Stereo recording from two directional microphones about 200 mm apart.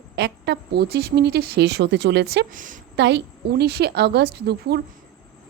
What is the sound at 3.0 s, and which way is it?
A woman's voice, 55° right (ahead or behind).